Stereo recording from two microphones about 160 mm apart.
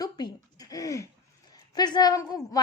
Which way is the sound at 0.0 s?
25° left (ahead or behind).